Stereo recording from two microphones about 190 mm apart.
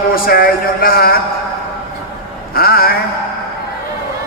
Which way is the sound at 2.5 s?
50° left (ahead or behind).